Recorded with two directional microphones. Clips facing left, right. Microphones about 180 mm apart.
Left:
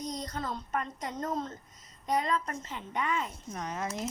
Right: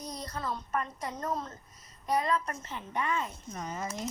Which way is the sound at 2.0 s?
20° left (ahead or behind).